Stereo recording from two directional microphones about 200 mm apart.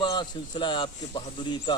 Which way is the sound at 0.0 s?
25° left (ahead or behind).